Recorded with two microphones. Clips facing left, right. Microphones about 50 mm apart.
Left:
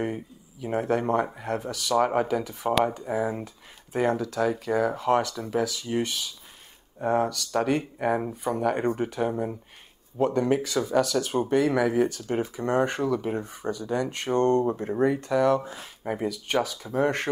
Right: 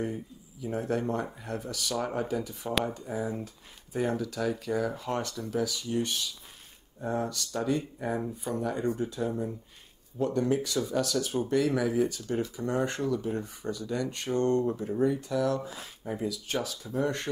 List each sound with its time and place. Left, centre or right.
0.0 s speech: left
7.0 s speech: left
8.2 s speech: left
13.3 s speech: left
14.8 s speech: left
15.6 s speech: left